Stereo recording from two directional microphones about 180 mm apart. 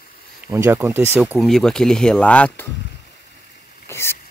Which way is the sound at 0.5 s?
15° right (ahead or behind).